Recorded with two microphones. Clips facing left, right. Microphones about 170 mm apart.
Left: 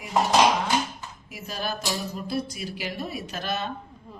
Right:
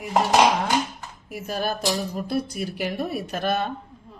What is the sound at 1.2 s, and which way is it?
Speech, 55° right (ahead or behind).